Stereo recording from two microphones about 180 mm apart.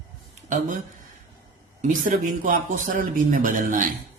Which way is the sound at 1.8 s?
45° right (ahead or behind).